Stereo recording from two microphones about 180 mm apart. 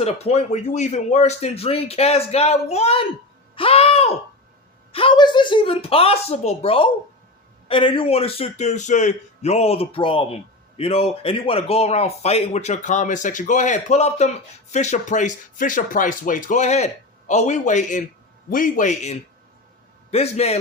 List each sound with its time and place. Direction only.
0.0 s a man's voice: 35° left (ahead or behind)